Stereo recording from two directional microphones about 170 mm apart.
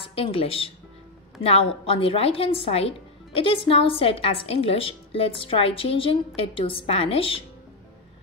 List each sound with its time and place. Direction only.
0.0 s speech: 35° left (ahead or behind)